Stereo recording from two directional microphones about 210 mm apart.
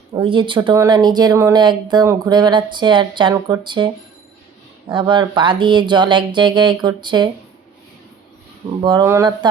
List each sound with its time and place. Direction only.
0.1 s speech: 25° right (ahead or behind)
8.8 s speech: 20° right (ahead or behind)